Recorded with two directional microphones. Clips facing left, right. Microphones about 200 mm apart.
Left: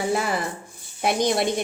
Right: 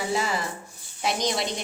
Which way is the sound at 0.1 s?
55° left (ahead or behind).